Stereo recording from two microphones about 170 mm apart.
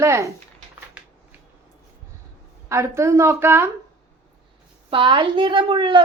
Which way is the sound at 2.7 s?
15° right (ahead or behind).